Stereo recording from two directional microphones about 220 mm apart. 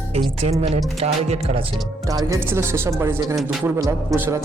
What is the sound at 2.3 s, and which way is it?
Speech, 10° right (ahead or behind).